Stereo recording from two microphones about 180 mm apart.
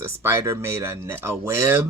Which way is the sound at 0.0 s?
15° right (ahead or behind).